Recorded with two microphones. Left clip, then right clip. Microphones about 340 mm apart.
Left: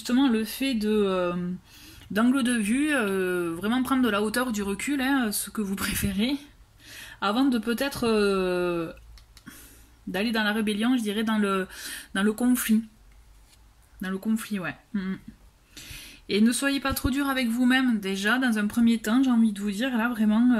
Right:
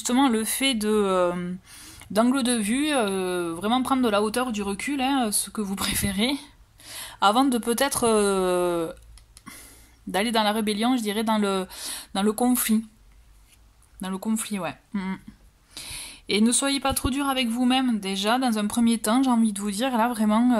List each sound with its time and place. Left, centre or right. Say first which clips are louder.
0.0 s speech: right 2 dB; centre
10.1 s speech: right 4 dB; centre
14.0 s speech: right 1 dB; centre